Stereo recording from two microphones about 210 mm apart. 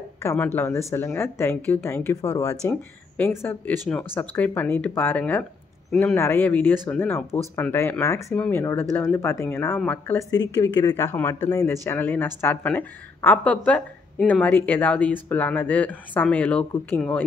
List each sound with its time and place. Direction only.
0.2 s speech: 15° left (ahead or behind)